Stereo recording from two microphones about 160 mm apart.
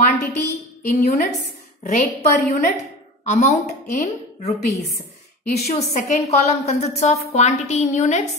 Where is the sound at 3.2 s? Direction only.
45° left (ahead or behind).